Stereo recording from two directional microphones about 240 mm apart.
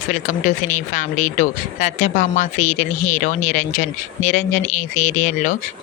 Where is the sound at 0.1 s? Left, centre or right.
Left.